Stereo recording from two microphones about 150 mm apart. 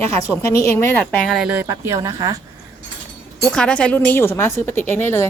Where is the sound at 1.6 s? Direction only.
20° right (ahead or behind).